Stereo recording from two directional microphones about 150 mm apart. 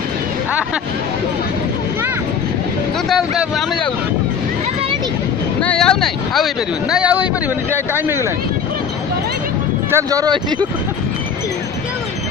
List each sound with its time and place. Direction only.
3.1 s speech: centre (ahead or behind)
5.6 s speech: 5° left (ahead or behind); by 8.3 s 15° right (ahead or behind)
9.8 s speech: 20° right (ahead or behind)